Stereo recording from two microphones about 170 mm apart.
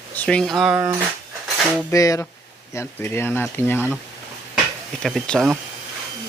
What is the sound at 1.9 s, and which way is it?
Speech, 20° left (ahead or behind).